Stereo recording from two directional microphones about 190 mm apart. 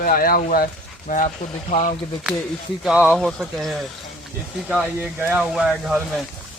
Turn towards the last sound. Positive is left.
turn(degrees=0)  # may be behind; listen again after turning